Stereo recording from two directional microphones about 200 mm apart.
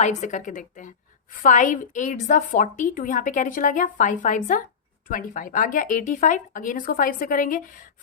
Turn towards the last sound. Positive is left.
turn(degrees=45)  # may be behind; listen again after turning